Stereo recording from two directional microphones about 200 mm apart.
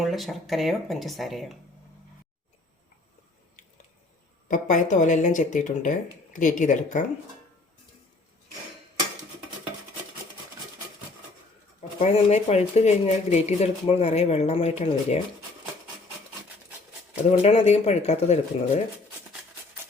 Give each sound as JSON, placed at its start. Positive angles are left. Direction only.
{"t": 0.0, "sound": "speech", "side_deg": 0}
{"t": 4.4, "sound": "speech", "side_deg": 40}
{"t": 11.8, "sound": "speech", "side_deg": 35}
{"t": 17.4, "sound": "speech", "side_deg": 30}